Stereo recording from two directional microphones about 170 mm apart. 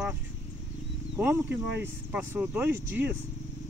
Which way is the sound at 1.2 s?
10° right (ahead or behind).